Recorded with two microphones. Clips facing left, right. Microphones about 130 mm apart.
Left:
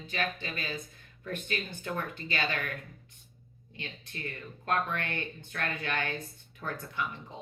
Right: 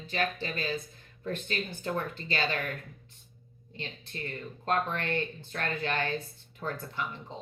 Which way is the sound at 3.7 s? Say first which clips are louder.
Right 3 dB; 35° right (ahead or behind).